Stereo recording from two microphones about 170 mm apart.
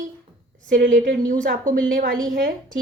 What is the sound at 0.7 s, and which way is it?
Speech, 90° right.